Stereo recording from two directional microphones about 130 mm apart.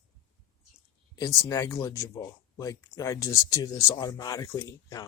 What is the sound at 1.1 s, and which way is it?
Speech, 25° left (ahead or behind).